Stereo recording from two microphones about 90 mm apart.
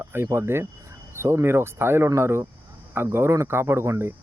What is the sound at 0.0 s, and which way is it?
Speech, 25° right (ahead or behind).